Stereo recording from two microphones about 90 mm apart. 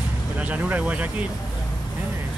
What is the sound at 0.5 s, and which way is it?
Speech, 15° right (ahead or behind).